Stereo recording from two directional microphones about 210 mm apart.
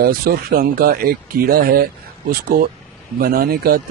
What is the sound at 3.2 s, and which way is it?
Speech, 45° right (ahead or behind).